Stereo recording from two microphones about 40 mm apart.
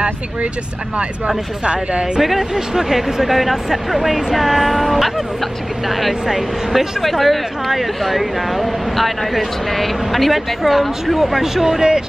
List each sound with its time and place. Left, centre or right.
1.6 s speech: right
2.1 s speech: centre